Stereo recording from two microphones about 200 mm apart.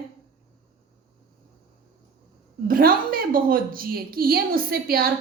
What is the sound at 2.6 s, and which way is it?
A woman's voice, 45° right (ahead or behind).